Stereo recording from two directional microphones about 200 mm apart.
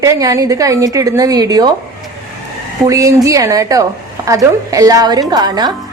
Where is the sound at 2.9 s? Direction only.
15° right (ahead or behind).